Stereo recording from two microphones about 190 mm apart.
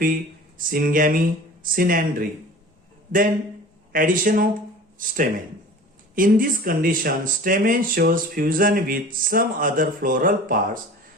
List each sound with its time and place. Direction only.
0.6 s speech: 50° right (ahead or behind)